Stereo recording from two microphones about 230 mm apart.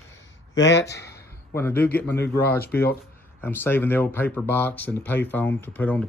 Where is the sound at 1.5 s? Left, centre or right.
Centre.